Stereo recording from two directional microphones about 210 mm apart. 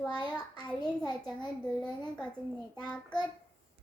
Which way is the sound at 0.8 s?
20° left (ahead or behind).